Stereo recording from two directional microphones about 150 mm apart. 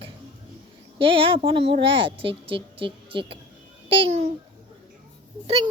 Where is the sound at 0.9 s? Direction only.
35° right (ahead or behind).